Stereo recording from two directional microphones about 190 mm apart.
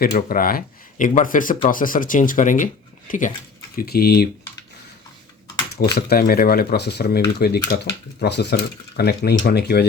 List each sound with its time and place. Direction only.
0.0 s speech: 50° left (ahead or behind)
3.8 s speech: 55° left (ahead or behind)
5.7 s speech: 55° left (ahead or behind)